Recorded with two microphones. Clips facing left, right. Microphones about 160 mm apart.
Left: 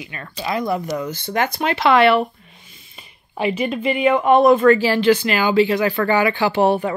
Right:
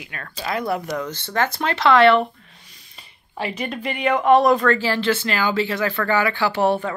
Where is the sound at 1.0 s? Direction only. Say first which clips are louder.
Left 2 dB; 10° left (ahead or behind).